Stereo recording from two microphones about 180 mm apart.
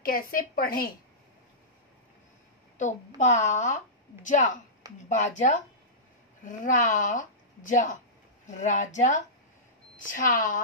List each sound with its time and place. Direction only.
0.0 s a woman's voice: 50° left (ahead or behind)
3.2 s a woman's voice: 40° left (ahead or behind)